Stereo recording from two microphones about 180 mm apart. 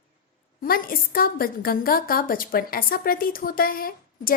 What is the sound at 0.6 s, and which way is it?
A woman's voice, 55° left (ahead or behind).